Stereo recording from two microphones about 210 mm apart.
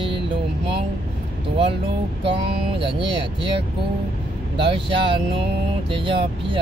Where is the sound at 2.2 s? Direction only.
25° right (ahead or behind).